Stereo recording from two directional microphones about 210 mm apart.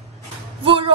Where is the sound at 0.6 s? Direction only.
25° right (ahead or behind).